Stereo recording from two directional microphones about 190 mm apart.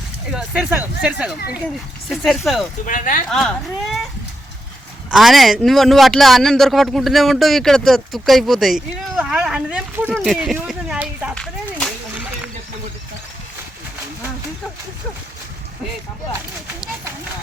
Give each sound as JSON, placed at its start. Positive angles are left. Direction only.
{"t": 0.3, "sound": "a man's voice", "side_deg": -5}
{"t": 2.8, "sound": "speech", "side_deg": 45}
{"t": 3.2, "sound": "a man's voice", "side_deg": 0}
{"t": 5.1, "sound": "a man's voice", "side_deg": 0}